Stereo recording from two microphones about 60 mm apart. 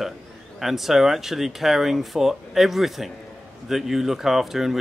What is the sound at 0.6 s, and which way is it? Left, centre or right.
Speech, centre.